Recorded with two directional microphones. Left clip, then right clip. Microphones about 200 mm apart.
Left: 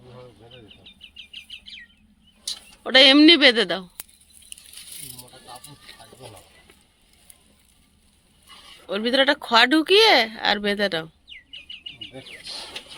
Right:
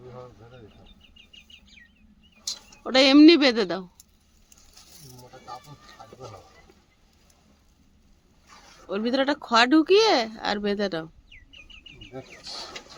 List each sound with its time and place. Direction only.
1.3 s chicken: 20° right (ahead or behind)
2.8 s speech: centre (ahead or behind)
8.9 s speech: centre (ahead or behind)